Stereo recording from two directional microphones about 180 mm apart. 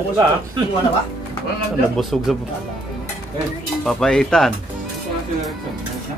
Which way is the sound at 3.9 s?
Centre (ahead or behind).